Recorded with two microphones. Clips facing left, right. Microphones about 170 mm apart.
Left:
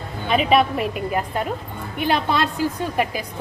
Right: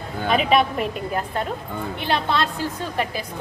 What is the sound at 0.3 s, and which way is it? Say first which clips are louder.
A woman's voice: left 1 dB; centre (ahead or behind).